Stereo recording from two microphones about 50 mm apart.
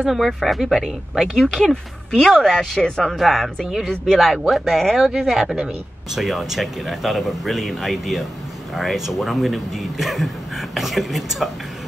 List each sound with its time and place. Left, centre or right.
0.0 s speech: centre
1.6 s speech: centre